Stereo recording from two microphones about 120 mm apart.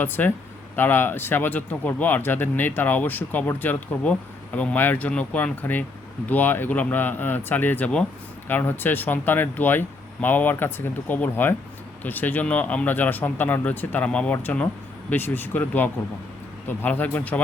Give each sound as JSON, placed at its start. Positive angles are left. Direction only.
{"t": 0.0, "sound": "speech", "side_deg": 15}